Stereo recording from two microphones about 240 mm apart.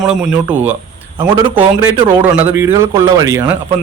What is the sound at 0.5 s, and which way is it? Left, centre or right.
Speech, centre.